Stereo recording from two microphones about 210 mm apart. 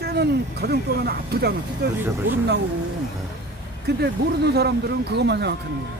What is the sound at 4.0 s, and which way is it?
Speech, 50° right (ahead or behind).